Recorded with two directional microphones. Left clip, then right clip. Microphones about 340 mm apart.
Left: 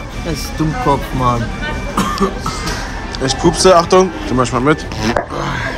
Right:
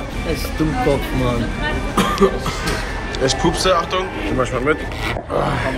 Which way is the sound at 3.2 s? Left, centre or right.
Centre.